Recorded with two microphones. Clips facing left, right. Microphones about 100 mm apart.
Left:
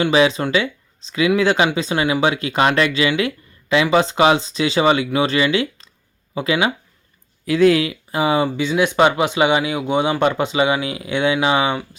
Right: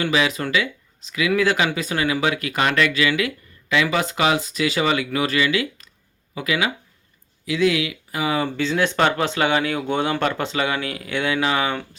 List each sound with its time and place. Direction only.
0.0 s speech: 30° left (ahead or behind)
7.4 s speech: 45° left (ahead or behind); by 11.8 s 20° left (ahead or behind)